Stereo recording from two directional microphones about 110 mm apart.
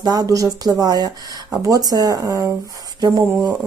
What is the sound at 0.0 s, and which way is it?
Speech, 35° right (ahead or behind).